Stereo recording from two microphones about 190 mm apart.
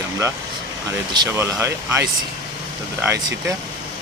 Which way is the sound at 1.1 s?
20° right (ahead or behind).